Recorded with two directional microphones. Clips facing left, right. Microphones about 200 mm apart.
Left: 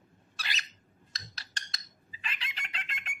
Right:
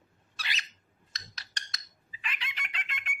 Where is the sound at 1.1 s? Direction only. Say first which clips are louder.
Even; 30° left (ahead or behind).